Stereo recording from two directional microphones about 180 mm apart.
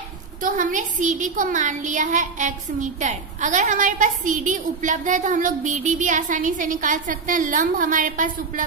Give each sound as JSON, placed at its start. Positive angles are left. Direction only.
{"t": 0.4, "sound": "a woman's voice", "side_deg": -50}